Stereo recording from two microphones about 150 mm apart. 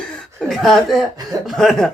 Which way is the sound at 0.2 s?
Centre (ahead or behind).